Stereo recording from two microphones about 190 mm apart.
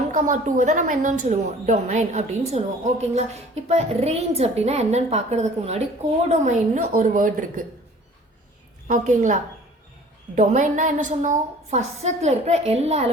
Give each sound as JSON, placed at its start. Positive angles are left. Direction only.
{"t": 0.1, "sound": "a woman's voice", "side_deg": -45}
{"t": 8.9, "sound": "a woman's voice", "side_deg": -40}